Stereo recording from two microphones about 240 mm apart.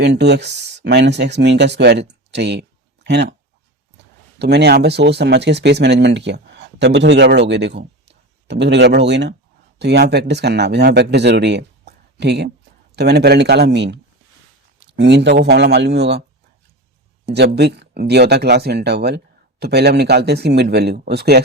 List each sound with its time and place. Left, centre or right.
0.0 s speech: right
4.4 s speech: right
17.2 s speech: right